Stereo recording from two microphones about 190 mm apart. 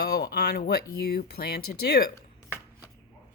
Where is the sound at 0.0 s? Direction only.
55° left (ahead or behind).